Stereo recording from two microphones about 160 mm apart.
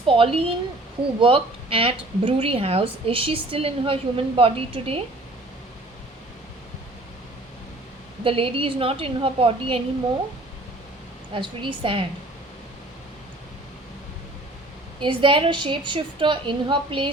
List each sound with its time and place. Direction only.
0.1 s a woman's voice: 35° right (ahead or behind)
8.2 s a woman's voice: 35° right (ahead or behind)
11.3 s a woman's voice: 30° right (ahead or behind)
15.0 s a woman's voice: 30° right (ahead or behind)